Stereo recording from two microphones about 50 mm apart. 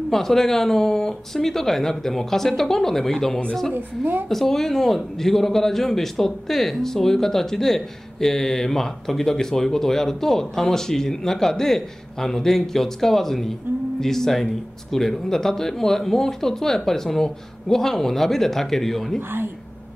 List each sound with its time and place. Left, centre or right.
0.1 s a man's voice: centre
3.7 s a woman's voice: right
4.3 s a man's voice: centre